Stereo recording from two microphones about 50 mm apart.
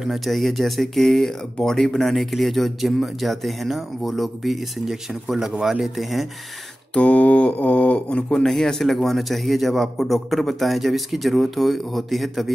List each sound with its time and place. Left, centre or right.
0.0 s speech: centre
6.9 s mantra: left
8.3 s speech: centre